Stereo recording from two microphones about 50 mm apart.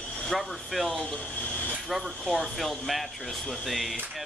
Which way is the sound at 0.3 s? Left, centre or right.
Centre.